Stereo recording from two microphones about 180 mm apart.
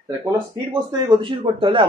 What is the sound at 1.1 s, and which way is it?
Speech, 25° right (ahead or behind).